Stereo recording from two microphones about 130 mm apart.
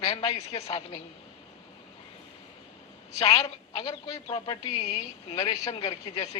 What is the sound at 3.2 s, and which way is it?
Speech, 50° left (ahead or behind).